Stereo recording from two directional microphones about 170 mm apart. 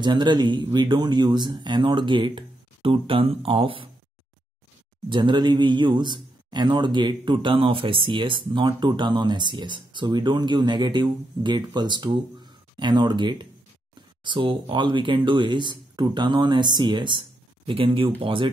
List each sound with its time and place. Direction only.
0.0 s a man's voice: 25° right (ahead or behind)
5.1 s a man's voice: 25° right (ahead or behind)